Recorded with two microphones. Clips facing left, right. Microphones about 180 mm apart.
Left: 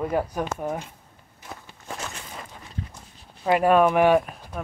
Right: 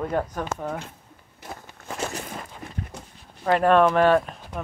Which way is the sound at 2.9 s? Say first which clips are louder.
Right 6 dB; 70° right (ahead or behind).